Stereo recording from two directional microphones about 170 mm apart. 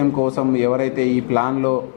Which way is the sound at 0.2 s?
15° left (ahead or behind).